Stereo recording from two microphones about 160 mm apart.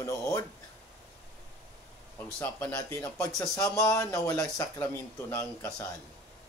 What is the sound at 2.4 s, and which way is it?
Speech, 10° left (ahead or behind).